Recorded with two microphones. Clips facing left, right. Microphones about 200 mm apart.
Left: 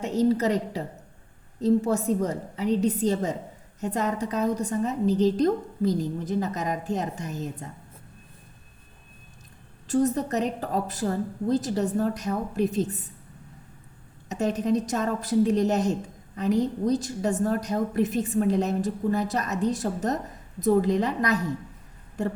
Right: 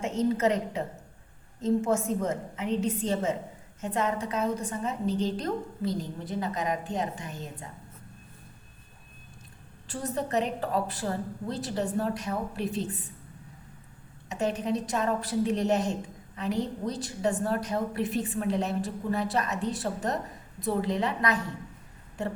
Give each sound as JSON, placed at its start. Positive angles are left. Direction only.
{"t": 0.0, "sound": "a woman's voice", "side_deg": 35}
{"t": 9.8, "sound": "a woman's voice", "side_deg": 40}
{"t": 14.3, "sound": "a woman's voice", "side_deg": 40}